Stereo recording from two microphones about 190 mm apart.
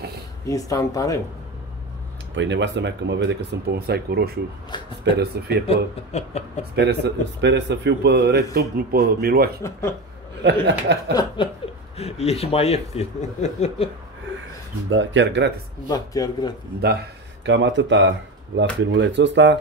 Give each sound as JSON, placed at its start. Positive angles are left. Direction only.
{"t": 0.5, "sound": "speech", "side_deg": 15}
{"t": 2.3, "sound": "speech", "side_deg": -70}
{"t": 4.6, "sound": "speech", "side_deg": 25}
{"t": 5.1, "sound": "speech", "side_deg": -60}
{"t": 5.7, "sound": "speech", "side_deg": 35}
{"t": 6.7, "sound": "speech", "side_deg": -60}
{"t": 9.6, "sound": "speech", "side_deg": 15}
{"t": 10.4, "sound": "speech", "side_deg": -65}
{"t": 11.4, "sound": "speech", "side_deg": 25}
{"t": 14.9, "sound": "speech", "side_deg": -85}
{"t": 15.9, "sound": "speech", "side_deg": 20}
{"t": 17.5, "sound": "speech", "side_deg": -75}